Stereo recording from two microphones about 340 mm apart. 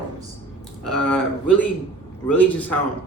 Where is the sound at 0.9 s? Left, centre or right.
Centre.